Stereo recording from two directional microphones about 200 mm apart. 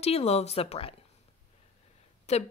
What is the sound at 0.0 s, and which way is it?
Speech, 30° left (ahead or behind).